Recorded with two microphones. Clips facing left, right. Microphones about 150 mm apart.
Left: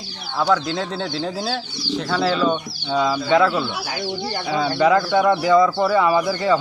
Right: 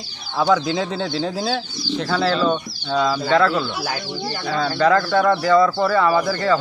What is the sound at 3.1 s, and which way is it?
Speech, 15° left (ahead or behind).